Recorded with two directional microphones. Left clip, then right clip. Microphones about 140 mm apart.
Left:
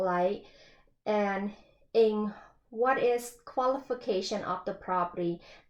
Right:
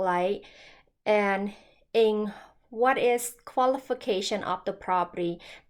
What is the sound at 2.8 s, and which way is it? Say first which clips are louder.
Speech: right 3 dB; 20° right (ahead or behind).